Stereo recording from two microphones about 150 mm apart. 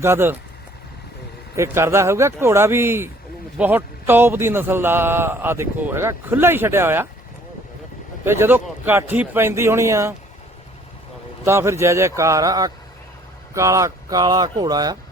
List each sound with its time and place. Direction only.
0.0 s a man's voice: 15° right (ahead or behind)
1.5 s a man's voice: 15° right (ahead or behind)
8.2 s a man's voice: 15° right (ahead or behind)
11.4 s speech: 15° right (ahead or behind)